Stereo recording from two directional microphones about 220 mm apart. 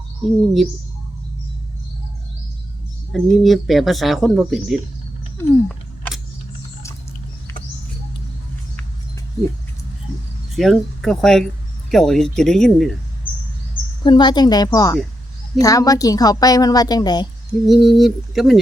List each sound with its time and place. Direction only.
3.1 s speech: centre (ahead or behind)
5.4 s a sound: centre (ahead or behind)
10.5 s speech: centre (ahead or behind)
14.0 s a woman's voice: 20° left (ahead or behind)
17.7 s speech: centre (ahead or behind)